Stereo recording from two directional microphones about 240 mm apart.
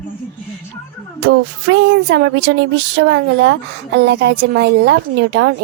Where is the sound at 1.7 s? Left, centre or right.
Right.